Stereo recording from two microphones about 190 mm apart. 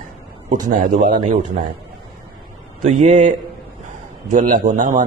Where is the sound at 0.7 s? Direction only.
40° right (ahead or behind).